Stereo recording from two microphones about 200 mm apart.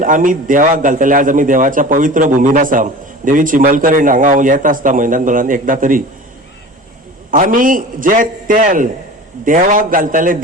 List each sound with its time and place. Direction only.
0.0 s a man's voice: 40° right (ahead or behind)
7.3 s a man's voice: 40° right (ahead or behind)